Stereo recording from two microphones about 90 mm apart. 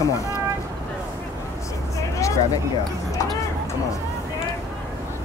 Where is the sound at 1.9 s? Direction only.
35° left (ahead or behind).